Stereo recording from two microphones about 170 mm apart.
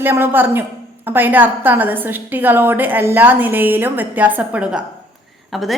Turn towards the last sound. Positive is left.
turn(degrees=0)  # may be behind; listen again after turning